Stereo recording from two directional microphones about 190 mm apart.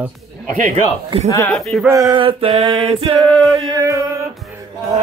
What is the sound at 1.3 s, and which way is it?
Speech, 15° left (ahead or behind).